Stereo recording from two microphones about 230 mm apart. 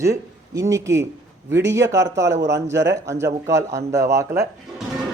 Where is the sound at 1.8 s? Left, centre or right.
Right.